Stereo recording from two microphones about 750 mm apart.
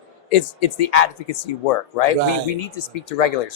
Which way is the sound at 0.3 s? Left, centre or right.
Left.